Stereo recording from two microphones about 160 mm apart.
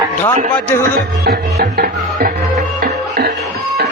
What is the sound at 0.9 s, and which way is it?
Music, 70° right (ahead or behind).